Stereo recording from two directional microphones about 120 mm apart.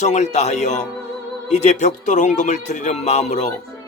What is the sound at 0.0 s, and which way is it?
Speech, 75° left (ahead or behind).